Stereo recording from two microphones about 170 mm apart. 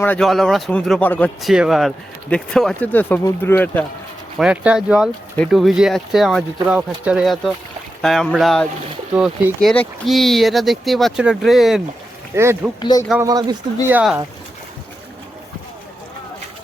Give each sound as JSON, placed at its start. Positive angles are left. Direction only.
{"t": 0.0, "sound": "speech", "side_deg": 5}
{"t": 1.4, "sound": "speech", "side_deg": 0}
{"t": 4.4, "sound": "speech", "side_deg": -5}
{"t": 12.3, "sound": "a man's voice", "side_deg": -15}
{"t": 12.8, "sound": "speech", "side_deg": 20}
{"t": 13.1, "sound": "speech", "side_deg": -20}
{"t": 13.8, "sound": "a man's voice", "side_deg": -5}